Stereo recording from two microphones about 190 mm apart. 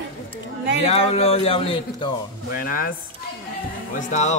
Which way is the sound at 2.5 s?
45° left (ahead or behind).